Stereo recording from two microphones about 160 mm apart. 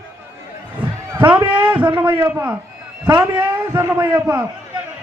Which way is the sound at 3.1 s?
25° right (ahead or behind).